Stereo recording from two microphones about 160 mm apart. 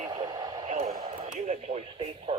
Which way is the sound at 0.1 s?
25° right (ahead or behind).